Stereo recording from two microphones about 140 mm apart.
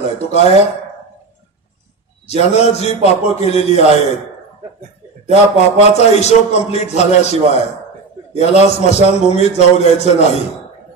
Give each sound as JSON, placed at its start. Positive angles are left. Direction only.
{"t": 0.2, "sound": "a man's voice", "side_deg": 50}
{"t": 2.2, "sound": "a man's voice", "side_deg": 50}
{"t": 5.3, "sound": "a man's voice", "side_deg": 50}